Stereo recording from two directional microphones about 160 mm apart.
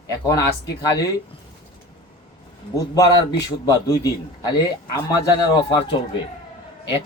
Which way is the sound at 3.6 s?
20° left (ahead or behind).